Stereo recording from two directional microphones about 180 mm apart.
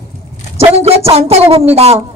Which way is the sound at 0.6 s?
35° right (ahead or behind).